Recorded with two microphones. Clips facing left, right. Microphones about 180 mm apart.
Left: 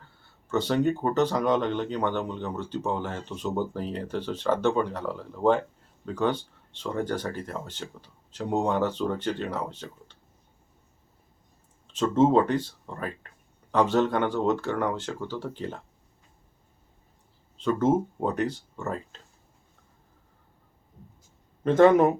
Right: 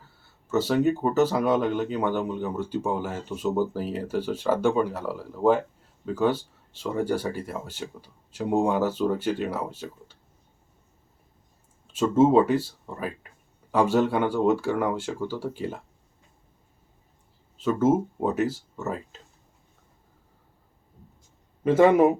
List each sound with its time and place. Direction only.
0.0 s speech: 5° right (ahead or behind)
11.9 s speech: 10° right (ahead or behind)
17.6 s speech: 5° right (ahead or behind)
21.6 s speech: 10° right (ahead or behind)